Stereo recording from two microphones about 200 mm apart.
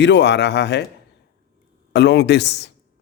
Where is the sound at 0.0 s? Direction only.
60° left (ahead or behind).